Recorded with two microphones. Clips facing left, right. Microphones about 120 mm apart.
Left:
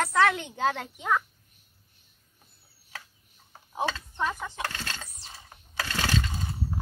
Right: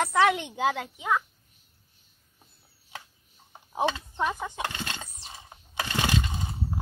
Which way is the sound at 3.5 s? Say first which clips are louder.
Right 3 dB; 20° right (ahead or behind).